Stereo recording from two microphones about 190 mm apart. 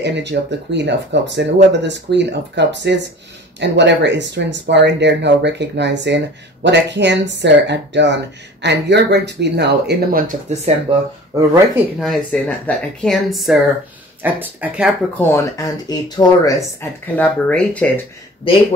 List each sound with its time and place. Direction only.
0.0 s speech: 65° right (ahead or behind)
10.5 s speech: 35° right (ahead or behind)
12.0 s speech: 5° left (ahead or behind)
15.1 s speech: 15° left (ahead or behind)